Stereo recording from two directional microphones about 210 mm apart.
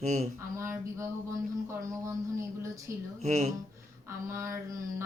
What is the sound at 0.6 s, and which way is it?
Speech, 15° right (ahead or behind).